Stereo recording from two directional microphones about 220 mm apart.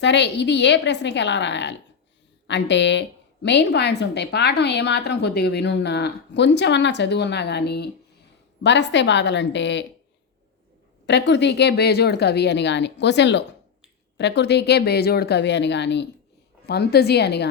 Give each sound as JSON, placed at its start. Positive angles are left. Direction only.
{"t": 0.0, "sound": "a woman's voice", "side_deg": 50}
{"t": 11.0, "sound": "a woman's voice", "side_deg": 50}